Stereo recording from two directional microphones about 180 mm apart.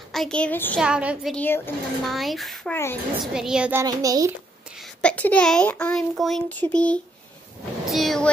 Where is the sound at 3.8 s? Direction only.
20° right (ahead or behind).